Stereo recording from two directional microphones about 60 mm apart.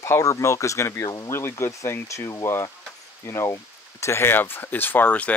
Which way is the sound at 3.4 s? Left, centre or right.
Left.